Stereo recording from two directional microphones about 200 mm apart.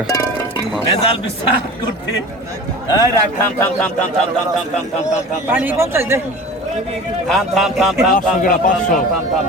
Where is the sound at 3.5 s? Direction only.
10° left (ahead or behind).